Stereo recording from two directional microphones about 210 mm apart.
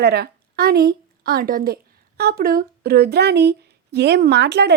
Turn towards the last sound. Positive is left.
turn(degrees=-50)  # may be behind; listen again after turning